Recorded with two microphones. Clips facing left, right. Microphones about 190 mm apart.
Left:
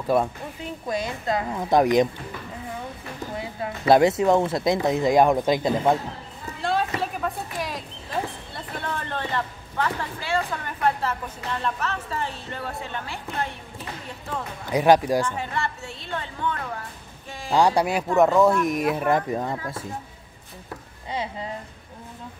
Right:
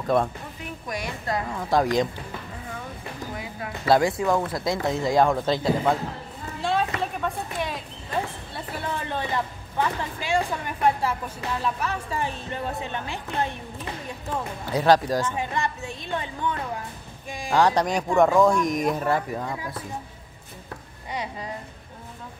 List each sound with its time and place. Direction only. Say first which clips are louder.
0.0 s speech: left 1 dB; 10° left (ahead or behind)
0.8 s speech: left 4 dB; 25° left (ahead or behind)
3.3 s a sound: left 3 dB; 25° left (ahead or behind)
4.5 s speech: left 4 dB; 25° left (ahead or behind)
6.6 s a sound: even; centre (ahead or behind)
8.5 s speech: right 1 dB; 10° right (ahead or behind)
14.7 s speech: left 2 dB; 15° left (ahead or behind)
15.3 s speech: right 1 dB; 15° right (ahead or behind)
17.5 s speech: left 1 dB; 10° left (ahead or behind)
19.0 s speech: left 3 dB; 20° left (ahead or behind)
21.1 s speech: left 2 dB; 25° left (ahead or behind)